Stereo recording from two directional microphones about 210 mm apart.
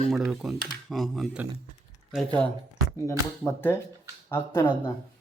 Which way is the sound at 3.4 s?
10° left (ahead or behind).